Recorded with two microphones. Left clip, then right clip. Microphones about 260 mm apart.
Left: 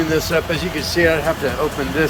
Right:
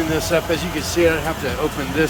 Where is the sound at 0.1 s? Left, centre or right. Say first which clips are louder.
Left 1 dB; centre.